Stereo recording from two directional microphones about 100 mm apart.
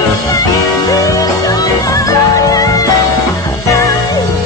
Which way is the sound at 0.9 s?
35° left (ahead or behind).